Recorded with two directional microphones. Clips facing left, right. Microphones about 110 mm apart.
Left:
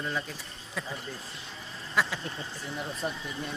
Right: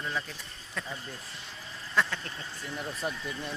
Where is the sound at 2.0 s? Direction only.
10° left (ahead or behind).